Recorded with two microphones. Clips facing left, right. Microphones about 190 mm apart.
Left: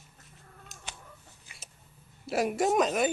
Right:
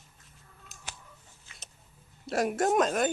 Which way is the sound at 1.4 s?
10° left (ahead or behind).